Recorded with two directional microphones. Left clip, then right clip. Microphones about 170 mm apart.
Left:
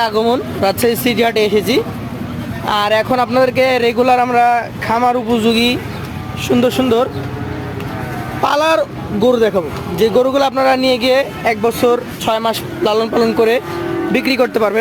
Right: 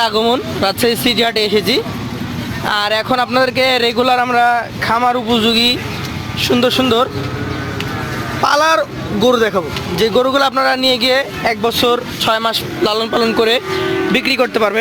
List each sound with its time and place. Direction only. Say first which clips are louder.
0.0 s speech: even; centre (ahead or behind)
6.5 s speech: even; 15° left (ahead or behind)
8.4 s speech: right 1 dB; 15° left (ahead or behind)
10.0 s speech: left 1 dB; 5° left (ahead or behind)